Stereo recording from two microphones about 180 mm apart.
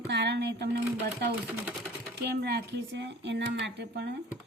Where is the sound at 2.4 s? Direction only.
65° right (ahead or behind).